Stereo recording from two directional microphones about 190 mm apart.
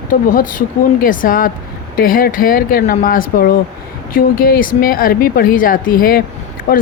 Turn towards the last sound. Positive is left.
turn(degrees=50)  # may be behind; listen again after turning